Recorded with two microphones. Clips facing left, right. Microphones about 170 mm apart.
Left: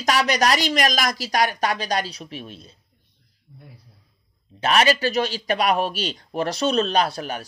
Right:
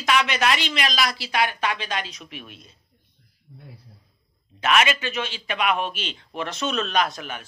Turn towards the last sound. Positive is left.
turn(degrees=35)  # may be behind; listen again after turning